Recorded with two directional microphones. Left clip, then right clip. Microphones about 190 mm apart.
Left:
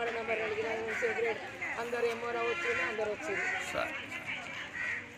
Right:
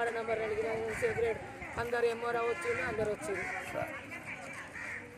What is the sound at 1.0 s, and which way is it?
A man's voice, 30° right (ahead or behind).